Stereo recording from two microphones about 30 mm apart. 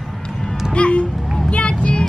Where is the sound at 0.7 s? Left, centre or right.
Left.